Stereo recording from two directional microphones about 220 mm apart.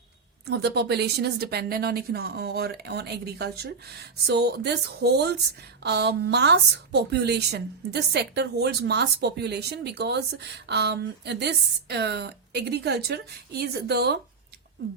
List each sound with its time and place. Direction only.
0.4 s a woman's voice: 50° right (ahead or behind)